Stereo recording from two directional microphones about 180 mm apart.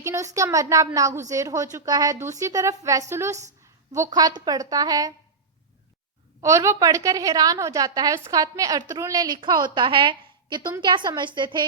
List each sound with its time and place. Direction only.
0.0 s a woman's voice: 15° right (ahead or behind)
6.4 s a woman's voice: 15° right (ahead or behind)